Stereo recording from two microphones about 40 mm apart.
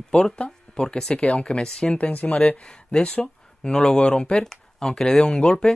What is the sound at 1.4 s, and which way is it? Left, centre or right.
Speech, centre.